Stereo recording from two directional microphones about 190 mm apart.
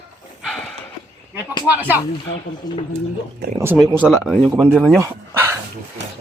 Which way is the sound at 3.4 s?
60° right (ahead or behind).